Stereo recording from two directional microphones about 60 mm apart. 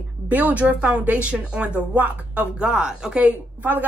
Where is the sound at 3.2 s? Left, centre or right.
Right.